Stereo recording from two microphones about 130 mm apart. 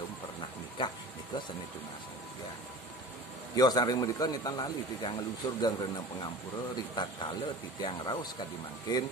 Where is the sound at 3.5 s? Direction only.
30° left (ahead or behind).